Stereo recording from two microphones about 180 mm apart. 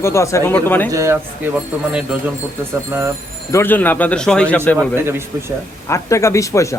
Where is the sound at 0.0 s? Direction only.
15° left (ahead or behind).